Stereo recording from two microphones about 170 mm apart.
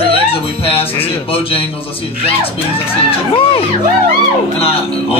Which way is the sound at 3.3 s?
35° left (ahead or behind).